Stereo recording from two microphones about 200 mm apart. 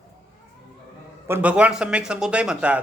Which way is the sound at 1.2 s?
10° right (ahead or behind).